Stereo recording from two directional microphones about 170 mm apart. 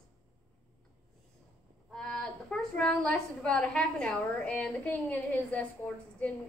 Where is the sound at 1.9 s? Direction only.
5° left (ahead or behind).